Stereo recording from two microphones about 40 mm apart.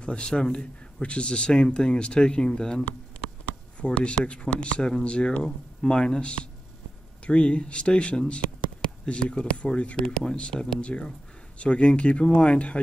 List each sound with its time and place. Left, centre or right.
0.0 s speech: left
9.9 s speech: centre
10.8 s speech: left